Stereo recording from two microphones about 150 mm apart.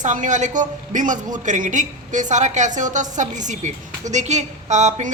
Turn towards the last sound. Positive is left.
turn(degrees=-50)  # may be behind; listen again after turning